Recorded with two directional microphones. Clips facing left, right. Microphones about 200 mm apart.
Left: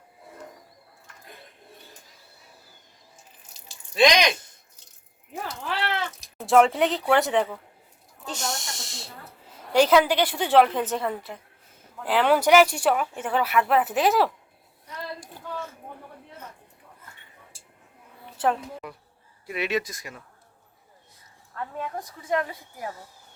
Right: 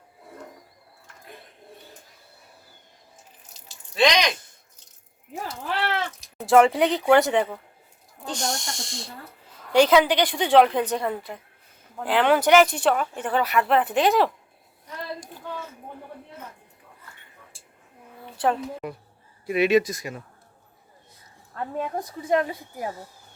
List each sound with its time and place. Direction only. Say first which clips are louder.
3.9 s speech: left 1 dB; 10° left (ahead or behind)
6.3 s speech: right 2 dB; centre (ahead or behind)
8.3 s snake: right 3 dB; 5° left (ahead or behind)
9.7 s speech: right 1 dB; 5° left (ahead or behind)
18.3 s a woman's voice: right 1 dB; 5° left (ahead or behind)
19.5 s speech: right 8 dB; 15° right (ahead or behind)
21.5 s speech: right 4 dB; 30° right (ahead or behind)